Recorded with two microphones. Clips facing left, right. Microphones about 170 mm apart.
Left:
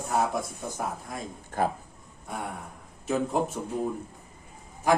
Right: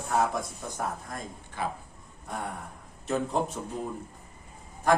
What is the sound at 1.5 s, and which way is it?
Speech, 45° left (ahead or behind).